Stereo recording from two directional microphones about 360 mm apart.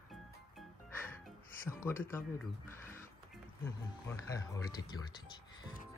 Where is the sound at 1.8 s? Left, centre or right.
Centre.